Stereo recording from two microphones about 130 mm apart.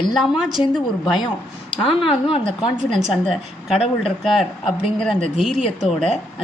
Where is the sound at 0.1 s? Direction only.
Centre (ahead or behind).